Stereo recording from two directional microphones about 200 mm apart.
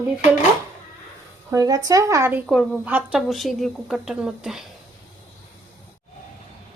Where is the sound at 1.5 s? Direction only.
20° right (ahead or behind).